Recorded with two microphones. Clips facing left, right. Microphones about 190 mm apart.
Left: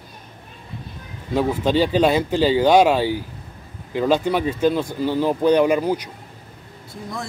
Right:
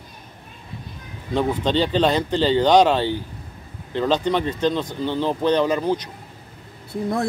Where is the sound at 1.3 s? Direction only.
10° left (ahead or behind).